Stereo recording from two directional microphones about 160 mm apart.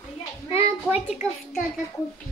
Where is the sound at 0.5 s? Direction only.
15° right (ahead or behind).